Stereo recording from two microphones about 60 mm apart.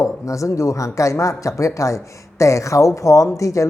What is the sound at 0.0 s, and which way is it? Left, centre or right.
Speech, left.